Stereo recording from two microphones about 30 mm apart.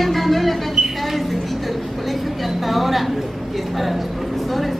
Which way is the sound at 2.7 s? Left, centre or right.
Centre.